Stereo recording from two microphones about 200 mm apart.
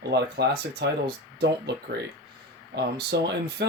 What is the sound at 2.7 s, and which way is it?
Speech, 55° right (ahead or behind).